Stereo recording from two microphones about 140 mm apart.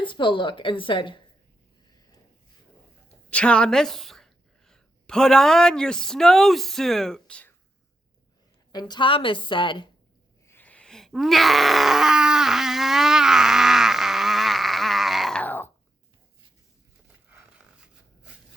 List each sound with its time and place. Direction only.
0.0 s a woman's voice: 35° left (ahead or behind)
3.2 s a woman's voice: 10° left (ahead or behind)
8.7 s a woman's voice: 30° left (ahead or behind)
10.4 s groan: 15° left (ahead or behind)